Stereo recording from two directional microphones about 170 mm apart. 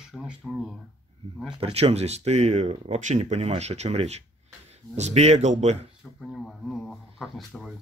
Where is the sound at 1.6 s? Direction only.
35° right (ahead or behind).